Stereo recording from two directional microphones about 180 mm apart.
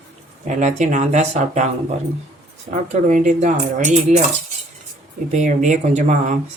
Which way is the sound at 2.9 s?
45° right (ahead or behind).